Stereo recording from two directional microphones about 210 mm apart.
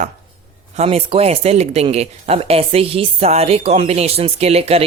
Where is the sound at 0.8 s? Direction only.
30° right (ahead or behind).